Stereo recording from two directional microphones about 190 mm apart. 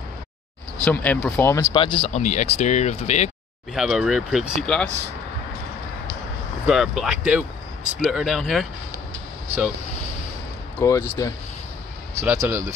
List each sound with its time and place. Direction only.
0.8 s speech: 5° left (ahead or behind)
1.7 s speech: 25° left (ahead or behind)
2.1 s speech: 35° left (ahead or behind)
3.7 s speech: centre (ahead or behind)
6.6 s speech: 5° right (ahead or behind)
10.8 s speech: 15° left (ahead or behind)
12.2 s speech: 15° right (ahead or behind)